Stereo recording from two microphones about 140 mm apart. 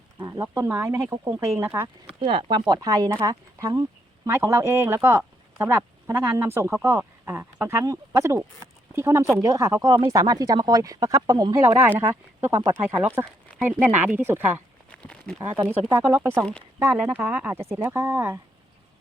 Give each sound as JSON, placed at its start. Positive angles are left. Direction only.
{"t": 0.2, "sound": "speech", "side_deg": -30}
{"t": 0.4, "sound": "speech", "side_deg": -20}
{"t": 2.1, "sound": "speech", "side_deg": -35}
{"t": 14.9, "sound": "a sound", "side_deg": 5}
{"t": 15.4, "sound": "speech", "side_deg": -15}